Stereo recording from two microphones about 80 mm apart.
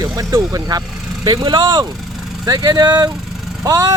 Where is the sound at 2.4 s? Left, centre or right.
Right.